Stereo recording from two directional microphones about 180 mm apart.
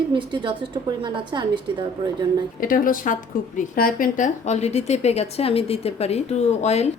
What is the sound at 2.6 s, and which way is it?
A woman's voice, 50° left (ahead or behind).